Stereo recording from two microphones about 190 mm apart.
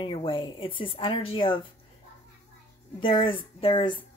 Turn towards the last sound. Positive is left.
turn(degrees=25)  # may be behind; listen again after turning